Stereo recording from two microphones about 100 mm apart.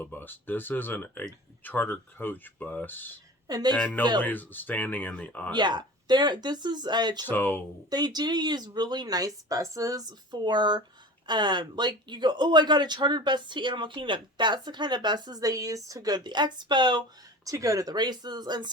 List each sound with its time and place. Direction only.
0.0 s speech: 20° left (ahead or behind)
3.4 s a woman's voice: 40° right (ahead or behind)
3.8 s speech: 15° left (ahead or behind)
5.5 s speech: 45° right (ahead or behind)
7.3 s speech: 20° left (ahead or behind)
7.9 s speech: 40° right (ahead or behind)
17.4 s speech: 35° right (ahead or behind)